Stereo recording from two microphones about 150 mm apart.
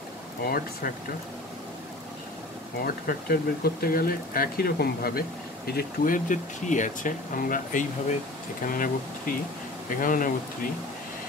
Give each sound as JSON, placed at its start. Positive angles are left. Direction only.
{"t": 0.4, "sound": "speech", "side_deg": 80}
{"t": 2.8, "sound": "speech", "side_deg": 75}
{"t": 5.7, "sound": "speech", "side_deg": 80}